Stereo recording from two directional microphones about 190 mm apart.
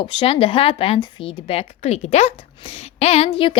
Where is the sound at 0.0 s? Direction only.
25° left (ahead or behind).